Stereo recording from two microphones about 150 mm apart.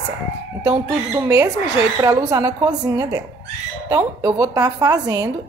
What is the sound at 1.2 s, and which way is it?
Speech, 20° right (ahead or behind).